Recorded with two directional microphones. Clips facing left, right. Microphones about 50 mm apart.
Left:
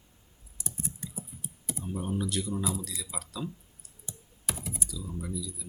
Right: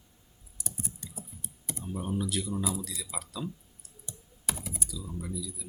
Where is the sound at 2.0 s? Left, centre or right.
Centre.